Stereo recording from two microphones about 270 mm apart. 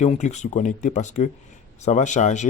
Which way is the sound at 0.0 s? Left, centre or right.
Left.